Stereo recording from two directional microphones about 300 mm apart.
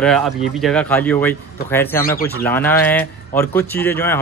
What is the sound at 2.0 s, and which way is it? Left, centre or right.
Speech, left.